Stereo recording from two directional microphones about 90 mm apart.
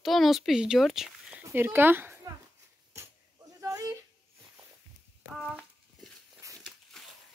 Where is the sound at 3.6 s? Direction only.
40° right (ahead or behind).